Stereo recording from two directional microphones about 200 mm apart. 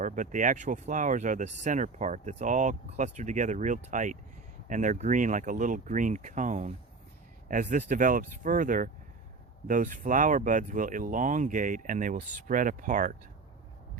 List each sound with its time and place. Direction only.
0.0 s speech: 40° right (ahead or behind)